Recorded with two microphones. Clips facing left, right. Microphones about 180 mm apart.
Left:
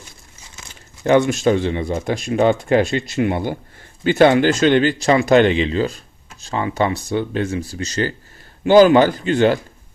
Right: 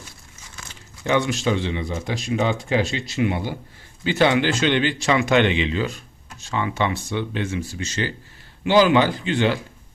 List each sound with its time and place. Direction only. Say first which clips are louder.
1.0 s speech: left 6 dB; 50° left (ahead or behind)